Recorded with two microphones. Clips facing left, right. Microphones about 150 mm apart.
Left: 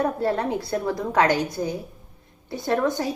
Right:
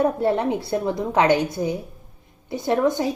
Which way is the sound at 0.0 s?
20° right (ahead or behind).